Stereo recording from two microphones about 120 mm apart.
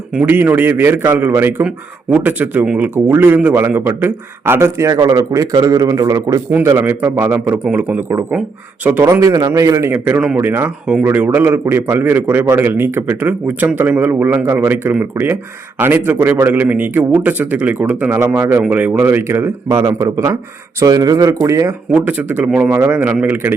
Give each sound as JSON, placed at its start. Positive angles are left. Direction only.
{"t": 0.1, "sound": "a man's voice", "side_deg": -15}
{"t": 6.5, "sound": "a man's voice", "side_deg": -20}
{"t": 9.2, "sound": "speech", "side_deg": -30}
{"t": 9.9, "sound": "a man's voice", "side_deg": -15}
{"t": 21.9, "sound": "a man's voice", "side_deg": -15}
{"t": 22.7, "sound": "a man's voice", "side_deg": -25}